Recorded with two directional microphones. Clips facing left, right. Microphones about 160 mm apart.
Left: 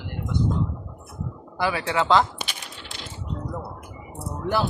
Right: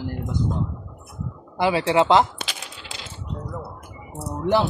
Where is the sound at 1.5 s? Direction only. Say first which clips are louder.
Right 5 dB; 25° right (ahead or behind).